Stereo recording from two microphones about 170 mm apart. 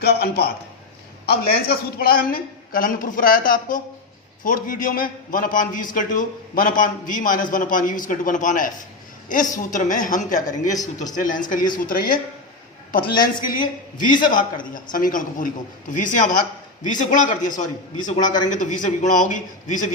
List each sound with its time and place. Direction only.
0.0 s a man's voice: 70° left (ahead or behind); by 12.2 s 55° left (ahead or behind)
13.2 s a man's voice: 55° left (ahead or behind)